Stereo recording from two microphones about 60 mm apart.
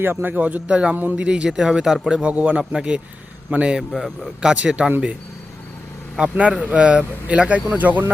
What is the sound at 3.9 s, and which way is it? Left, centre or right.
Speech, centre.